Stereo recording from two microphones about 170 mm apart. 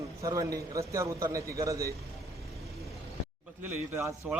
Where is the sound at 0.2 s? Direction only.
20° right (ahead or behind).